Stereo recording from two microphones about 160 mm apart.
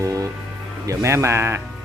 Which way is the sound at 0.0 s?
20° right (ahead or behind).